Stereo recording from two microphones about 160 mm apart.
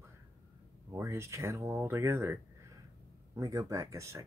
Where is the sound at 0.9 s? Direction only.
15° right (ahead or behind).